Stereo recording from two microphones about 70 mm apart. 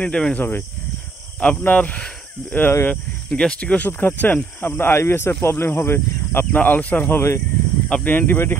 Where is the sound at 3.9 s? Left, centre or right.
Left.